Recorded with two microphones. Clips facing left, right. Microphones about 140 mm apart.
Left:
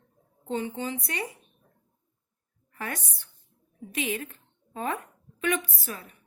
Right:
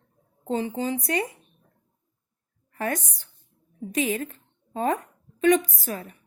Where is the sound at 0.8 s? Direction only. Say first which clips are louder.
Right 6 dB; 40° right (ahead or behind).